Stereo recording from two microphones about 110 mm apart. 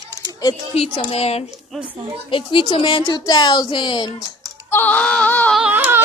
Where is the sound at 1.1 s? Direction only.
65° left (ahead or behind).